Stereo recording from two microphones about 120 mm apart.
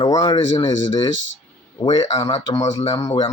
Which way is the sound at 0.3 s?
45° left (ahead or behind).